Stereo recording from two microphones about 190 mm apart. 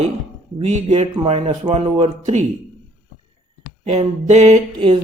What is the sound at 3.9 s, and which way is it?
Speech, 35° right (ahead or behind).